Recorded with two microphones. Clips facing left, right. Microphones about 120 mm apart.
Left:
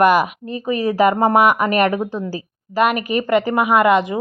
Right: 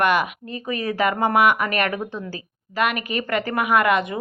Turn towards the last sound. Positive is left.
turn(degrees=30)  # may be behind; listen again after turning